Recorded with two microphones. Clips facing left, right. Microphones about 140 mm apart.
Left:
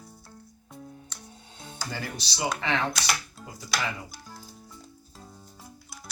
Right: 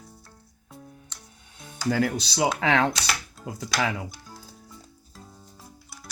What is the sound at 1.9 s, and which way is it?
Speech, 85° right.